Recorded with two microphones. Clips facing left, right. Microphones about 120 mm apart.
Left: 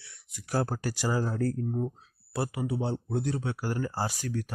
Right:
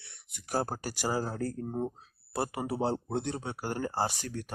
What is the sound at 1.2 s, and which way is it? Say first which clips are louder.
Speech: left 5 dB; 30° right (ahead or behind).